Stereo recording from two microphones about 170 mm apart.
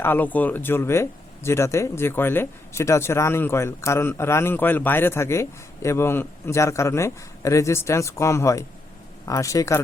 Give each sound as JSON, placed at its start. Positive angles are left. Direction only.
{"t": 0.0, "sound": "a man's voice", "side_deg": 10}